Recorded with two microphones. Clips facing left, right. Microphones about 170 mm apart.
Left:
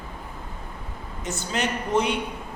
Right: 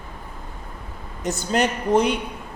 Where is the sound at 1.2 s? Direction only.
40° right (ahead or behind).